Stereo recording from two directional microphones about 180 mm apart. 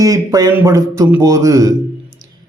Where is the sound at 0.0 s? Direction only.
20° right (ahead or behind).